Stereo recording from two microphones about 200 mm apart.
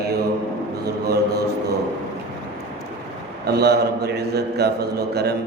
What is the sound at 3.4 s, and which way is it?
A man's voice, 55° right (ahead or behind).